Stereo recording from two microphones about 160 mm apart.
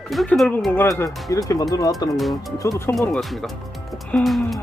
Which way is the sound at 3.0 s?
Centre (ahead or behind).